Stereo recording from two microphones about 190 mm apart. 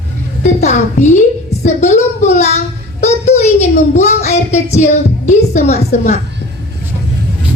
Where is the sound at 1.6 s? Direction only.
35° left (ahead or behind).